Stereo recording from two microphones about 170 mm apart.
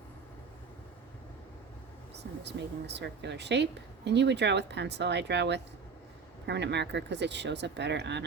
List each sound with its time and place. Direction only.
2.1 s speech: 90° right